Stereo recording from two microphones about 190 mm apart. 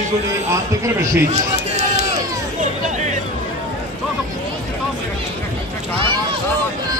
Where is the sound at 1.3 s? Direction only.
35° right (ahead or behind).